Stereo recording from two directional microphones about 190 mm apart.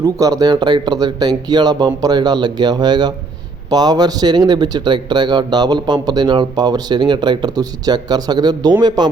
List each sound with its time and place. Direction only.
0.0 s speech: 20° right (ahead or behind)